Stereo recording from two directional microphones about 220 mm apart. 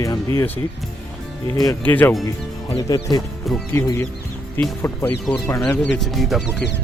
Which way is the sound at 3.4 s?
5° left (ahead or behind).